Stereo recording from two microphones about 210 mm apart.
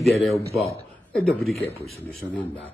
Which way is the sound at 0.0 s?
Centre (ahead or behind).